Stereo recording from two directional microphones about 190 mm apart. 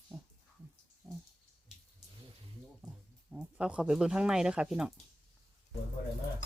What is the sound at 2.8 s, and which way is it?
Music, 5° right (ahead or behind).